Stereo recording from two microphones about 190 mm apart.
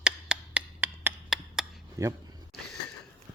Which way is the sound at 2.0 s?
15° right (ahead or behind).